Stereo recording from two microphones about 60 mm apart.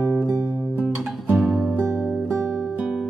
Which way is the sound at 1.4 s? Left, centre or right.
Centre.